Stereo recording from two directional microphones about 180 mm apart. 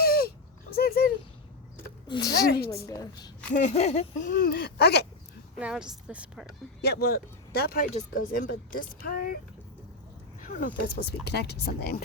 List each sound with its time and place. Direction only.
0.0 s a sound: 55° left (ahead or behind)
2.0 s a woman's voice: 25° left (ahead or behind)
2.5 s speech: 60° left (ahead or behind)
2.8 s a woman's voice: 20° left (ahead or behind)
3.5 s speech: 40° left (ahead or behind); by 5.0 s 65° left (ahead or behind)
5.5 s a woman's voice: 5° right (ahead or behind)
6.8 s speech: 60° left (ahead or behind)
10.4 s speech: 50° left (ahead or behind)
10.8 s speech: 65° left (ahead or behind)